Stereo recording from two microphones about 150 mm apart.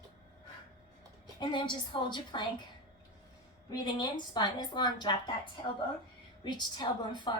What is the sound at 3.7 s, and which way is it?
A woman's voice, 30° left (ahead or behind).